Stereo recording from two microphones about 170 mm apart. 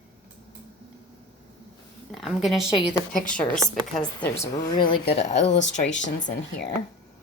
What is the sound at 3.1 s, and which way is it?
Speech, 50° left (ahead or behind).